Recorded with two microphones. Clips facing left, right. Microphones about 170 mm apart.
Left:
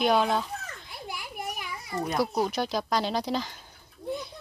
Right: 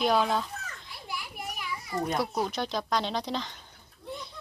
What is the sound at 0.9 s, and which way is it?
Children playing, 50° left (ahead or behind).